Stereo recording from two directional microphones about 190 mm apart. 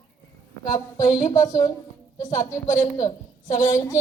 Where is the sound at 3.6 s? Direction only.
15° left (ahead or behind).